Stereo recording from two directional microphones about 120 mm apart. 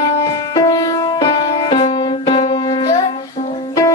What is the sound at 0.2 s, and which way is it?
Music, 30° left (ahead or behind).